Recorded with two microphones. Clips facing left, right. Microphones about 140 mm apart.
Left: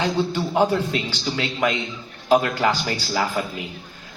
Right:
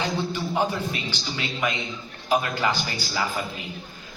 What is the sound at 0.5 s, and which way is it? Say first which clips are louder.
A man's voice: left 7 dB; 65° left (ahead or behind).